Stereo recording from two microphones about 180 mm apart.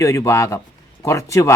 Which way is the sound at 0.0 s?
15° left (ahead or behind).